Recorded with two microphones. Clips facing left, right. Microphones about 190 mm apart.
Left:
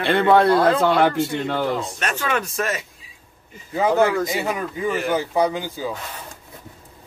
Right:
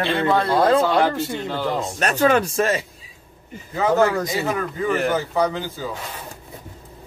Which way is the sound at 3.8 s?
10° left (ahead or behind).